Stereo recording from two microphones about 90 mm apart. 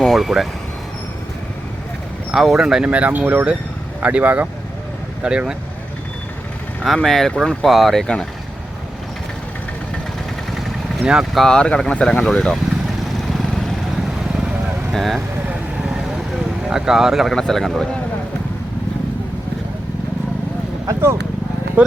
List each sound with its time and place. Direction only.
0.0 s vehicle: centre (ahead or behind)
2.3 s speech: 5° right (ahead or behind)
6.8 s speech: centre (ahead or behind)
11.0 s speech: 5° right (ahead or behind)
11.4 s speech: 10° left (ahead or behind)
14.9 s speech: centre (ahead or behind)
15.4 s vehicle: 10° right (ahead or behind)
16.6 s speech: 5° right (ahead or behind)
20.8 s a sound: 30° right (ahead or behind)
21.8 s speech: 15° right (ahead or behind)